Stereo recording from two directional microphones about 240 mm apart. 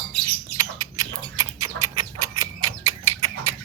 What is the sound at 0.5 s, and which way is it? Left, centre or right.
Bird, centre.